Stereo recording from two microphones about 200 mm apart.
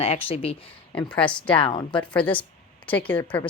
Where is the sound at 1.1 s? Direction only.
5° left (ahead or behind).